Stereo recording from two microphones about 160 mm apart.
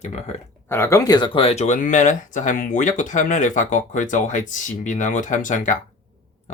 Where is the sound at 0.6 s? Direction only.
15° left (ahead or behind); by 5.8 s 50° left (ahead or behind).